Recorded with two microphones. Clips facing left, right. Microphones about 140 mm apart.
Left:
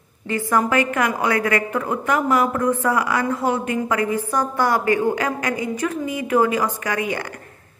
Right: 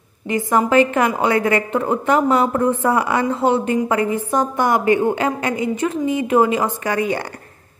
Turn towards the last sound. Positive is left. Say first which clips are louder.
# right 4 dB
turn(degrees=-30)  # may be behind; listen again after turning